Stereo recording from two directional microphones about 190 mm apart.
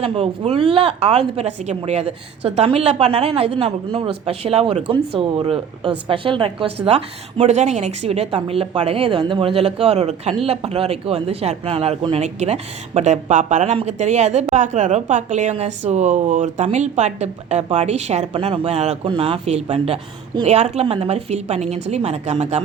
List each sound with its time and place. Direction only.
0.0 s a woman's voice: 30° right (ahead or behind)